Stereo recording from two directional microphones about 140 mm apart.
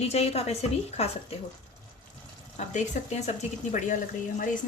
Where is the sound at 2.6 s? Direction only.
55° left (ahead or behind).